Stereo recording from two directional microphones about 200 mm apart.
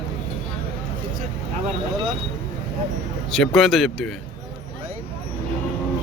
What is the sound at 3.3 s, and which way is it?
Speech, centre (ahead or behind).